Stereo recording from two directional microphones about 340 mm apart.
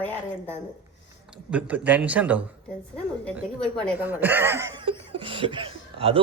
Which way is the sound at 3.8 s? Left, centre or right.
Centre.